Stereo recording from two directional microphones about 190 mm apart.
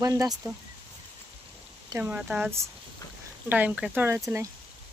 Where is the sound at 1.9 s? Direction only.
10° right (ahead or behind).